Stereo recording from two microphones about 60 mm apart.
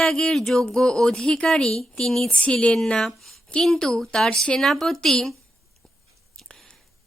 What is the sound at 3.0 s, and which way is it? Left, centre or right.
A woman's voice, centre.